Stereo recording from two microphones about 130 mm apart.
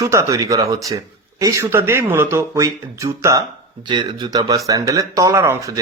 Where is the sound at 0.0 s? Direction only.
25° right (ahead or behind).